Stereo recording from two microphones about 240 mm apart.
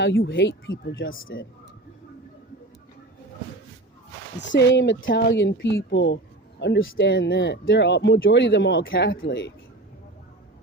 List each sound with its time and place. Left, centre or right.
0.0 s speech: left
4.4 s speech: left